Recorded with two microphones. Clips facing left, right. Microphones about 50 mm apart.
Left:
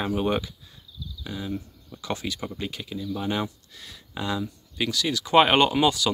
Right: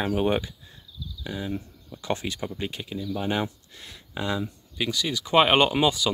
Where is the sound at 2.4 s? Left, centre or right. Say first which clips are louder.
Right 1 dB; centre.